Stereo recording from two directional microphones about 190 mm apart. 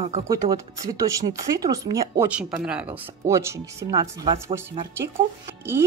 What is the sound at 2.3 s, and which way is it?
Speech, 5° right (ahead or behind).